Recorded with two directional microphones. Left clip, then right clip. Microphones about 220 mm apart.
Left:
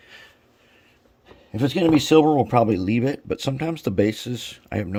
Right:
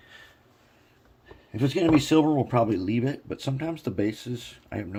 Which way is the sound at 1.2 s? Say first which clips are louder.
Left 4 dB; 45° left (ahead or behind).